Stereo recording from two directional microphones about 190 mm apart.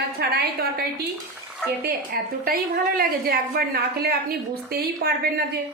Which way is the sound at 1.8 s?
55° right (ahead or behind).